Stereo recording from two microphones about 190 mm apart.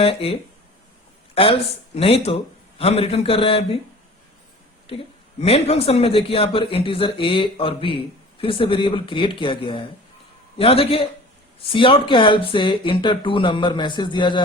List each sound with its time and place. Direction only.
0.0 s speech: 30° left (ahead or behind)
2.0 s a man's voice: 30° left (ahead or behind)
5.4 s speech: 35° left (ahead or behind)